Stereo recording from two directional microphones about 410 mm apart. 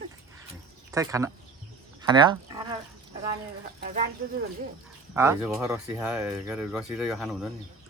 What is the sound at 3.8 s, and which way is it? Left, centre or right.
Speech, right.